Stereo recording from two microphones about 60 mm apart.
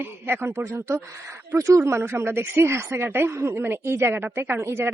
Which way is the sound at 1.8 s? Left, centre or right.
Right.